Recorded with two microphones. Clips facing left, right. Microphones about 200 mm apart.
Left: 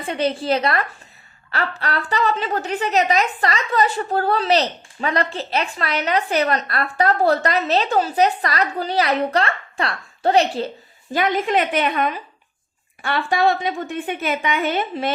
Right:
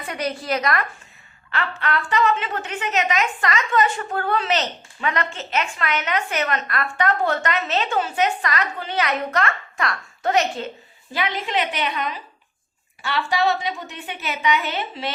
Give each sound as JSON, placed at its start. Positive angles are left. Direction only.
{"t": 0.0, "sound": "a woman's voice", "side_deg": 30}
{"t": 11.1, "sound": "a woman's voice", "side_deg": 50}